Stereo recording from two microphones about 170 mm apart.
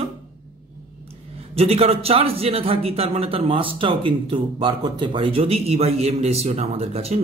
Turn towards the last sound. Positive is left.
turn(degrees=-40)  # may be behind; listen again after turning